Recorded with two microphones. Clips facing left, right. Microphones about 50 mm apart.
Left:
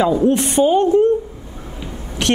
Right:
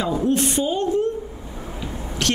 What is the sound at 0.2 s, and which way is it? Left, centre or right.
Speech, left.